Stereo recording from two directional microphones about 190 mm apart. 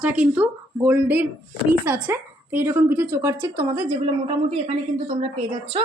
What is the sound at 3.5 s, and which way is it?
Speech, 30° right (ahead or behind).